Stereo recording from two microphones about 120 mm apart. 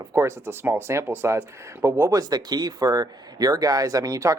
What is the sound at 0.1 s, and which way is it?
Speech, 20° right (ahead or behind).